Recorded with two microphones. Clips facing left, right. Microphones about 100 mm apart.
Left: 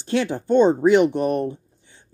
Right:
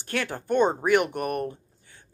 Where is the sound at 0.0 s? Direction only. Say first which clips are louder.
Left 8 dB; 20° left (ahead or behind).